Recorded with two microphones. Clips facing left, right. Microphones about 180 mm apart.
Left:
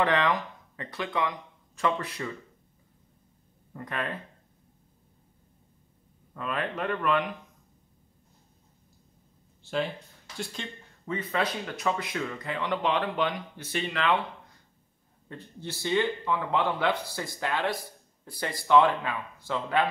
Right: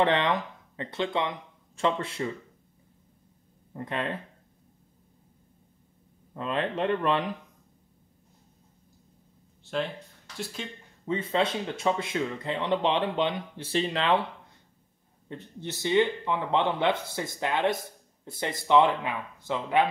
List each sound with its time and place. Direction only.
0.0 s speech: 25° right (ahead or behind)
3.7 s speech: 25° right (ahead or behind)
6.3 s speech: 25° right (ahead or behind)
9.6 s speech: centre (ahead or behind)
11.1 s speech: 25° right (ahead or behind)
15.2 s speech: 20° right (ahead or behind)